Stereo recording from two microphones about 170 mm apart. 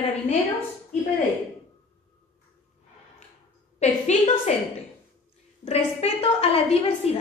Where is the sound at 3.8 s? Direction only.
40° left (ahead or behind).